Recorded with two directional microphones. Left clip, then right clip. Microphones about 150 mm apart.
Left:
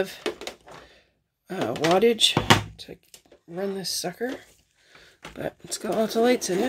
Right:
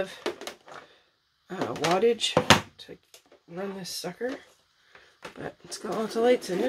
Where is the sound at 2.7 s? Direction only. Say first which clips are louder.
Left 3 dB; 90° left.